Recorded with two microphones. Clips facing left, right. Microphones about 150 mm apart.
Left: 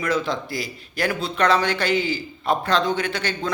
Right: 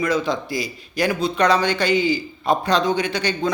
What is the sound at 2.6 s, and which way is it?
Speech, 15° right (ahead or behind).